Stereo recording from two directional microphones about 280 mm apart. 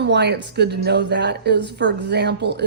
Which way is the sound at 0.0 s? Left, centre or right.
Right.